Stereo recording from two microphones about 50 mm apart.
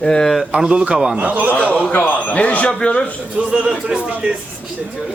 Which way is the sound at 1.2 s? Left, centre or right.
Right.